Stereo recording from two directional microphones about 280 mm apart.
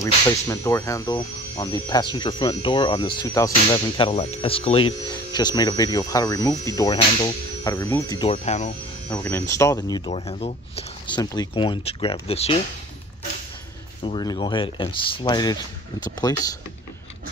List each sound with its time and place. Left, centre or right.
0.0 s speech: centre
9.1 s speech: centre
14.0 s speech: centre